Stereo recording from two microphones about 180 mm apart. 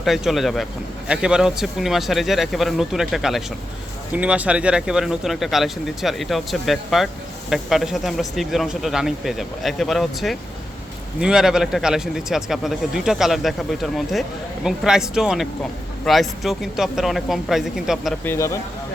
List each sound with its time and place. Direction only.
0.0 s a man's voice: centre (ahead or behind)
18.3 s speech: 15° left (ahead or behind)